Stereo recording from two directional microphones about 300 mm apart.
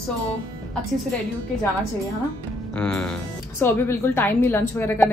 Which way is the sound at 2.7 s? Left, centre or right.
Centre.